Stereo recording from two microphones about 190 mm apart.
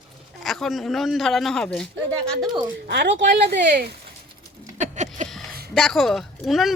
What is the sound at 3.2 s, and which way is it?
Speech, 40° right (ahead or behind).